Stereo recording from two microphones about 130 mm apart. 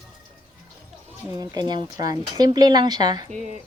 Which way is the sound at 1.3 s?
30° right (ahead or behind).